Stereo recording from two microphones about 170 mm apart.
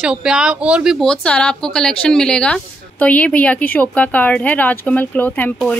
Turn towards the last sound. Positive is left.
turn(degrees=10)  # may be behind; listen again after turning